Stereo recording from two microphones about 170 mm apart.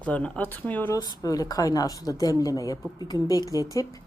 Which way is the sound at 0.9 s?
20° left (ahead or behind).